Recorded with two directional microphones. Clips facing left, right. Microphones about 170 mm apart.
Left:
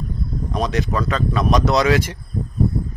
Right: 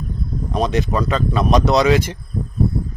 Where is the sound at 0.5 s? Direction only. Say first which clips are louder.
Right 3 dB; 25° right (ahead or behind).